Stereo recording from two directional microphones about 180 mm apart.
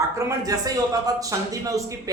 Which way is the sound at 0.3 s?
20° right (ahead or behind).